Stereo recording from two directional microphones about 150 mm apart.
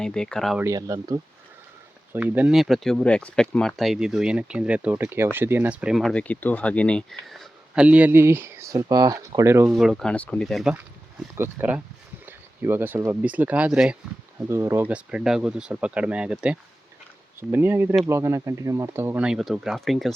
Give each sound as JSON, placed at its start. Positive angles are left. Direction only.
{"t": 0.0, "sound": "speech", "side_deg": 5}
{"t": 0.6, "sound": "speech", "side_deg": -20}
{"t": 2.1, "sound": "speech", "side_deg": -10}
{"t": 7.9, "sound": "speech", "side_deg": -10}
{"t": 9.6, "sound": "speech", "side_deg": -5}
{"t": 11.3, "sound": "speech", "side_deg": -15}
{"t": 14.3, "sound": "speech", "side_deg": -15}